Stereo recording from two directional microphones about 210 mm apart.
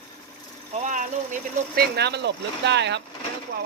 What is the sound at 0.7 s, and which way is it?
Speech, 35° right (ahead or behind).